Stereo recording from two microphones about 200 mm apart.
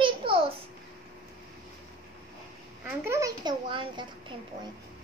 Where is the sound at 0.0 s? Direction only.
25° right (ahead or behind).